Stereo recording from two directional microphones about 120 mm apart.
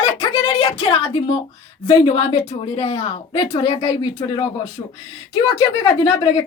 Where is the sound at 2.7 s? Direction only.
60° left (ahead or behind).